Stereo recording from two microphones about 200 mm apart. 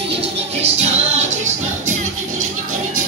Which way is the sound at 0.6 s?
35° right (ahead or behind).